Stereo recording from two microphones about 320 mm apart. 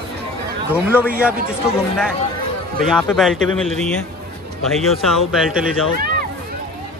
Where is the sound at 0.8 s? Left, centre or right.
Centre.